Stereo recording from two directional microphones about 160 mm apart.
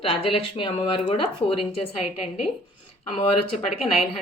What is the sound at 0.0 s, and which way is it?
Speech, 35° left (ahead or behind).